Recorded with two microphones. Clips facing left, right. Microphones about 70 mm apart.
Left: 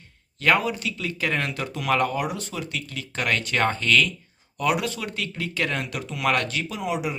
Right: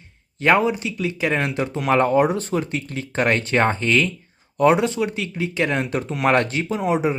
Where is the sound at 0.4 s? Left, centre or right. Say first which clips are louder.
Right 4 dB; right.